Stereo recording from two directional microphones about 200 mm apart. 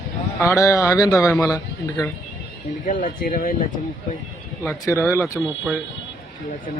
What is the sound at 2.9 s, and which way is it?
Speech, 40° left (ahead or behind).